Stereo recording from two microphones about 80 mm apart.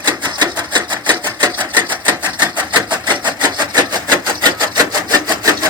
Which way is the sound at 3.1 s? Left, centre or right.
Right.